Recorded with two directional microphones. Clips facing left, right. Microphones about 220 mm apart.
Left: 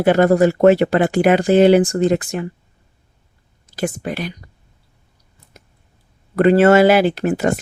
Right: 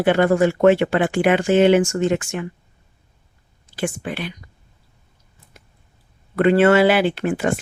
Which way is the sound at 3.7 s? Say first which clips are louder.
Left 2 dB; 40° left (ahead or behind).